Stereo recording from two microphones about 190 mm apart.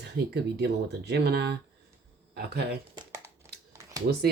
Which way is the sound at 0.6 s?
60° right (ahead or behind).